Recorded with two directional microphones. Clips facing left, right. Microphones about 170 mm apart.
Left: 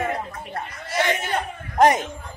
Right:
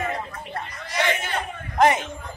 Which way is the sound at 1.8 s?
40° left (ahead or behind).